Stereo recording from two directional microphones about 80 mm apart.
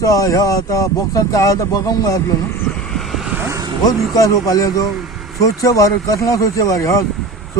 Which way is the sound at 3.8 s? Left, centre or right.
Left.